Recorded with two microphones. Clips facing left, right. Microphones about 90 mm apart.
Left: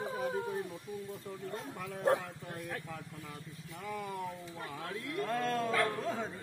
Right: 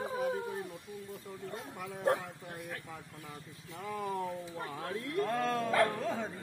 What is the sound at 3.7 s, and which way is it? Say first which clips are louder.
Speech: right 3 dB; 30° right (ahead or behind).